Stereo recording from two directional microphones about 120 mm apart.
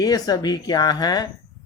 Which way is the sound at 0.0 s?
30° left (ahead or behind).